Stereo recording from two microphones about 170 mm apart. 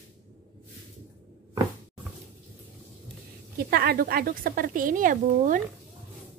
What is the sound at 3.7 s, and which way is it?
Speech, 65° right (ahead or behind).